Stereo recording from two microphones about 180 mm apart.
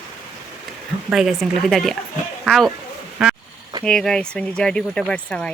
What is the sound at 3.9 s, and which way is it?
Speech, 5° left (ahead or behind).